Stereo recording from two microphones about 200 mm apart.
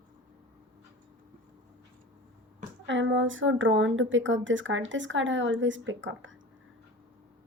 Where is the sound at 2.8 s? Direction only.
65° right (ahead or behind).